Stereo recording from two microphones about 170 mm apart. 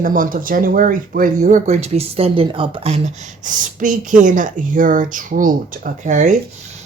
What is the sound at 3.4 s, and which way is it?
A woman's voice, 50° right (ahead or behind).